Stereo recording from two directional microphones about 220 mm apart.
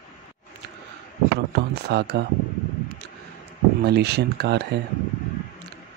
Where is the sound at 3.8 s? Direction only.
50° right (ahead or behind).